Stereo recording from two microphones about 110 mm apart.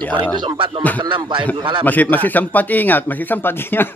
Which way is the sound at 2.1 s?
15° left (ahead or behind).